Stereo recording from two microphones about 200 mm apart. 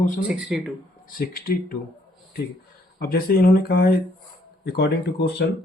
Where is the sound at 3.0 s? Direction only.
50° left (ahead or behind).